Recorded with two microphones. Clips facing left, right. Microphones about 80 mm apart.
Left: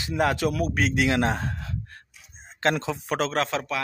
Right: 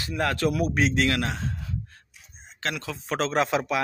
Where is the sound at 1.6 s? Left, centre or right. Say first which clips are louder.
Even; left.